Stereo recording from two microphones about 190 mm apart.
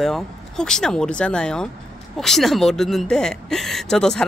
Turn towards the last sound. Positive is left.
turn(degrees=5)  # may be behind; listen again after turning